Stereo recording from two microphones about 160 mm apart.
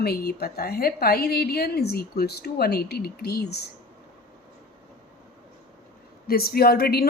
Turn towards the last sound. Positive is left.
turn(degrees=75)  # may be behind; listen again after turning